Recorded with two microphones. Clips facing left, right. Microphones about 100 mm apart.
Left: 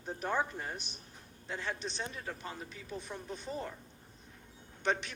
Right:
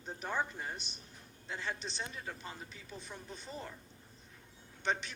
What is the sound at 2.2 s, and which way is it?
Speech, 15° left (ahead or behind).